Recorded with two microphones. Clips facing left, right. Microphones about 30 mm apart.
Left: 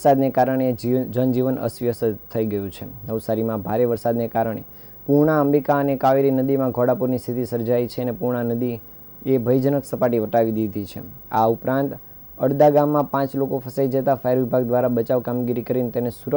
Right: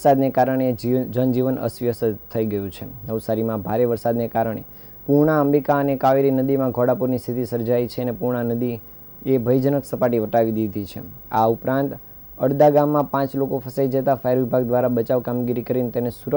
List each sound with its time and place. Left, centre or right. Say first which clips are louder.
0.0 s a man's voice: even; centre